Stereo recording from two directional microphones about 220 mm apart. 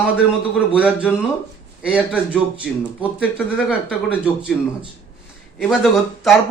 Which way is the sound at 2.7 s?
5° left (ahead or behind).